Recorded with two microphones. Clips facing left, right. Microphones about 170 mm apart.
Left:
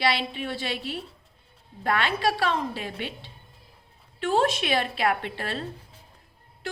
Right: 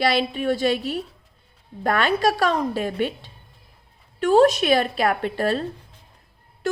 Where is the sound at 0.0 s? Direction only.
45° right (ahead or behind).